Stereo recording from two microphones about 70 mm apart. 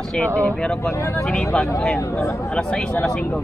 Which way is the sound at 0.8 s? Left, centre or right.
Left.